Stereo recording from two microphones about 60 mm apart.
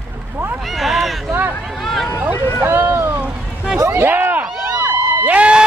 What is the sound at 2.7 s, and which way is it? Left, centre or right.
Boat, right.